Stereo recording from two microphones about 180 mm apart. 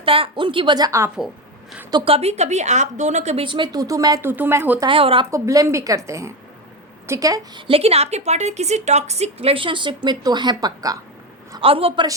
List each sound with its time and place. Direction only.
0.0 s a woman's voice: 30° right (ahead or behind)
1.9 s a woman's voice: 30° right (ahead or behind); by 4.9 s 15° right (ahead or behind)
4.9 s a woman's voice: 30° right (ahead or behind)
5.3 s a woman's voice: 15° right (ahead or behind)
11.5 s a woman's voice: 30° right (ahead or behind)